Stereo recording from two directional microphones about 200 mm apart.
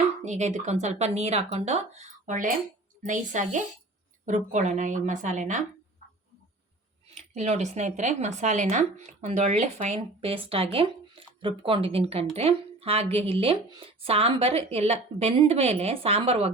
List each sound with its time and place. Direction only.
0.2 s speech: 35° right (ahead or behind)
7.1 s speech: 30° right (ahead or behind)